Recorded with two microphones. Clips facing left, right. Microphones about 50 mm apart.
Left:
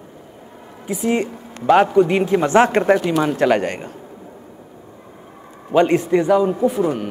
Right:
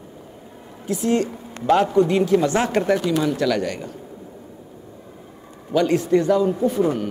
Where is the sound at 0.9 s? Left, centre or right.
Centre; by 3.9 s left.